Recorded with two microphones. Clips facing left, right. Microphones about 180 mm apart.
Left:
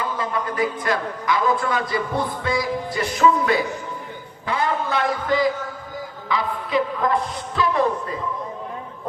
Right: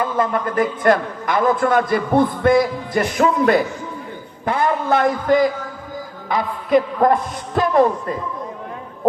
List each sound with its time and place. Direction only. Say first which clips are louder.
0.0 s a man's voice: right 6 dB; 50° right (ahead or behind)